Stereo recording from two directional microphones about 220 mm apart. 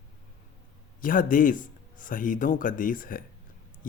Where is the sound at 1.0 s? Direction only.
40° left (ahead or behind).